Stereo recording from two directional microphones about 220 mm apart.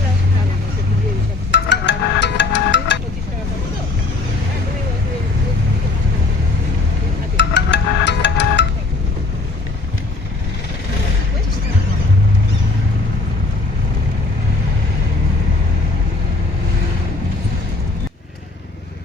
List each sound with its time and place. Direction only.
1.5 s music: 50° left (ahead or behind)
7.3 s music: 55° left (ahead or behind)